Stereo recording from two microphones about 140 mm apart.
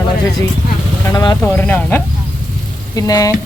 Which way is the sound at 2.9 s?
25° left (ahead or behind).